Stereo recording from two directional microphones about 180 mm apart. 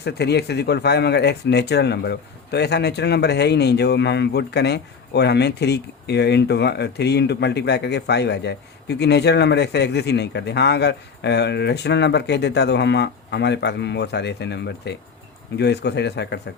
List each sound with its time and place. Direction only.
0.0 s speech: 65° left (ahead or behind)